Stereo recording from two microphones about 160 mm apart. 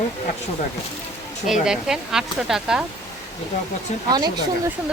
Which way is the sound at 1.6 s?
5° right (ahead or behind).